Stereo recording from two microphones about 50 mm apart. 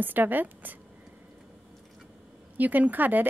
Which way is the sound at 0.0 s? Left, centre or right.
Right.